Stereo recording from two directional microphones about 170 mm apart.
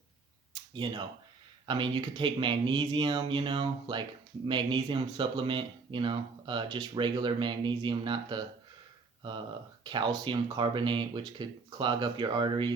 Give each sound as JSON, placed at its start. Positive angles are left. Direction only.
{"t": 0.5, "sound": "a sound", "side_deg": -30}
{"t": 1.6, "sound": "speech", "side_deg": -25}
{"t": 9.8, "sound": "speech", "side_deg": -25}